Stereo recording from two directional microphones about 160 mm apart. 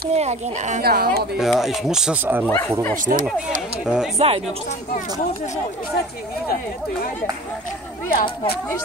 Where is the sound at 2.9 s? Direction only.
55° right (ahead or behind).